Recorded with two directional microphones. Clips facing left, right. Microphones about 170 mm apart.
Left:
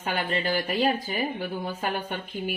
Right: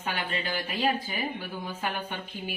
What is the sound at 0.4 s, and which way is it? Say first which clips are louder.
A woman's voice: left 3 dB; 40° left (ahead or behind).